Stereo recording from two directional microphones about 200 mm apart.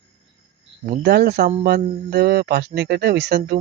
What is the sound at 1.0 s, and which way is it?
Speech, 55° right (ahead or behind).